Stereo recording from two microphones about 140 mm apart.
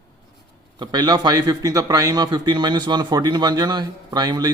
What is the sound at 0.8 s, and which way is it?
A man's voice, 30° right (ahead or behind).